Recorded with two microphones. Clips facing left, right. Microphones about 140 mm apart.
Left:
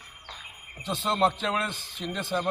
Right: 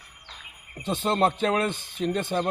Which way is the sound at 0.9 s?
50° right (ahead or behind).